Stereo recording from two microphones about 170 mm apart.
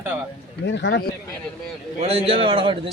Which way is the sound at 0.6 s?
90° left.